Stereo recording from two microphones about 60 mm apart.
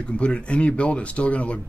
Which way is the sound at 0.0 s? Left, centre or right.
Centre.